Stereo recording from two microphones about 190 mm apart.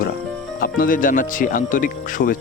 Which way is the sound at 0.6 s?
45° left (ahead or behind).